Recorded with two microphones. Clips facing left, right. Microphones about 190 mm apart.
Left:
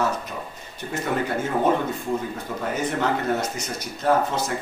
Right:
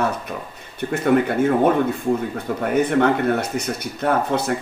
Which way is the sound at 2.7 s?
60° right (ahead or behind).